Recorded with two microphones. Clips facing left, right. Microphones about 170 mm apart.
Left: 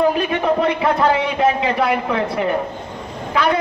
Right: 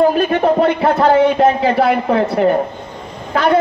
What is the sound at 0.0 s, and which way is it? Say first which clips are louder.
A man's voice: right 4 dB; 40° right (ahead or behind).